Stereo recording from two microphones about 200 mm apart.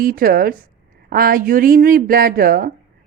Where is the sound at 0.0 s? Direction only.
45° right (ahead or behind).